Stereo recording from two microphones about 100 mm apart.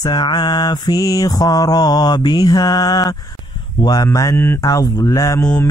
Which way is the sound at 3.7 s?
40° left (ahead or behind).